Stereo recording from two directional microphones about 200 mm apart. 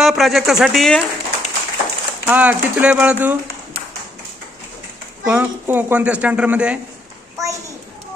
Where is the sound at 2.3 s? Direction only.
10° right (ahead or behind).